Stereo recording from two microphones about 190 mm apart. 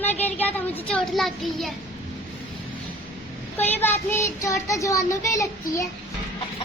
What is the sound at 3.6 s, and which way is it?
Child singing, 10° left (ahead or behind).